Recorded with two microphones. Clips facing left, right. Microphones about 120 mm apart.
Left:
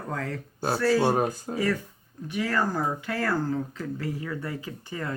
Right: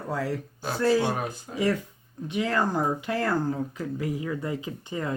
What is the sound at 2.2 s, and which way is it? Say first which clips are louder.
Speech: right 1 dB; 20° right (ahead or behind).